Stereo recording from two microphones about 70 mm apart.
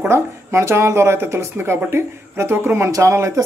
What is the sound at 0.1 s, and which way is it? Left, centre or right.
Speech, right.